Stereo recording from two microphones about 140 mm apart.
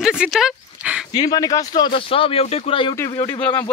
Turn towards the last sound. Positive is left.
turn(degrees=25)  # may be behind; listen again after turning